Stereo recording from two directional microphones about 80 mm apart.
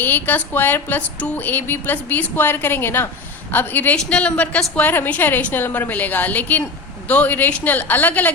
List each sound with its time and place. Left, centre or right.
0.0 s speech: left
3.9 s speech: centre